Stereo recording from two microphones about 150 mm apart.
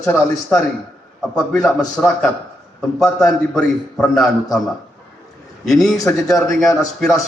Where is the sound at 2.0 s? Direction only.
5° left (ahead or behind).